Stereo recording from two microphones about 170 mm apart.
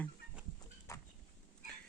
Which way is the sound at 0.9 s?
15° left (ahead or behind).